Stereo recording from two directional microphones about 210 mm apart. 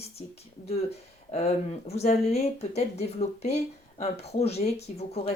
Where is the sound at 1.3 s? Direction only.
30° left (ahead or behind).